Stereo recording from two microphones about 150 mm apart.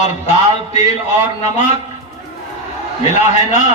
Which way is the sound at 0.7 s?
55° left (ahead or behind).